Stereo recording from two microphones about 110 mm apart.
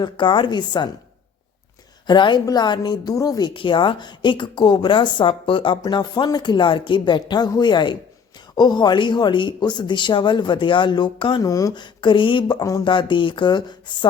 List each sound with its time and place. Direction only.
0.0 s speech: 45° left (ahead or behind)
2.0 s a woman's voice: 45° left (ahead or behind)
3.5 s speech: 50° left (ahead or behind)
11.4 s speech: 35° left (ahead or behind)